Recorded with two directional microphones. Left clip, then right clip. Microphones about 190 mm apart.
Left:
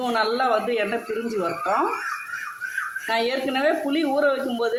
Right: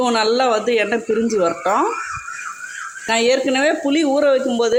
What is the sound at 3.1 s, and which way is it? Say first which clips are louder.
Speech: right 9 dB; 40° right (ahead or behind).